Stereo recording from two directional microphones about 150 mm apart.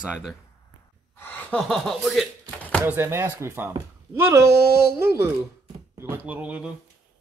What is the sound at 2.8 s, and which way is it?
Speech, 15° right (ahead or behind).